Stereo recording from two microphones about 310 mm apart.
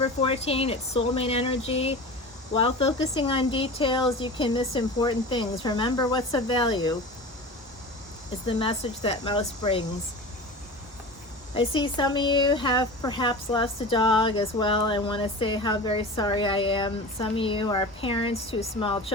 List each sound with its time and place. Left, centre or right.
0.0 s speech: centre
8.4 s speech: centre
11.7 s speech: centre